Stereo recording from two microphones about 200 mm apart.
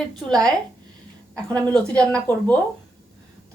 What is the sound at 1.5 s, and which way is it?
A woman's voice, 5° left (ahead or behind).